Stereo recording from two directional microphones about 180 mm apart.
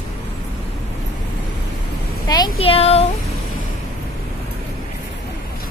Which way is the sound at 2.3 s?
25° left (ahead or behind).